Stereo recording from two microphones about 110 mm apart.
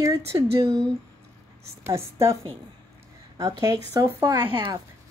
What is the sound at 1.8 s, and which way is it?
Speech, 25° right (ahead or behind).